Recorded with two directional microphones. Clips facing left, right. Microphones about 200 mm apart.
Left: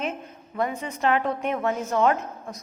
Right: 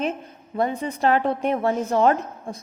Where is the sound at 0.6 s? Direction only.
35° right (ahead or behind).